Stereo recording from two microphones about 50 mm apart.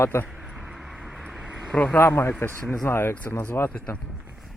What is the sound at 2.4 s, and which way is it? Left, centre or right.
Speech, left.